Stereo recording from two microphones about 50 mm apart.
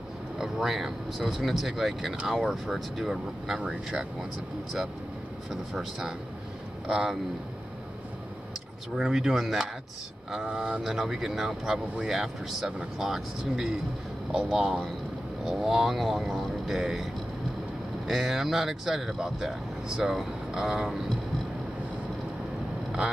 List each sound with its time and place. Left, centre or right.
0.4 s speech: centre
5.5 s speech: centre
8.9 s speech: centre